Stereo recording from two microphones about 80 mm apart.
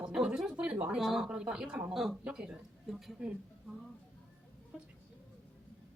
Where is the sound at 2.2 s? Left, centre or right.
Centre.